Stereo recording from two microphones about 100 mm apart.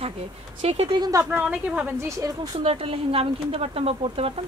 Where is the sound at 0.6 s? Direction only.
90° right.